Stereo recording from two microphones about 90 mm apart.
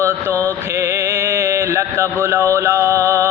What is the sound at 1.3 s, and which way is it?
Mantra, 30° right (ahead or behind).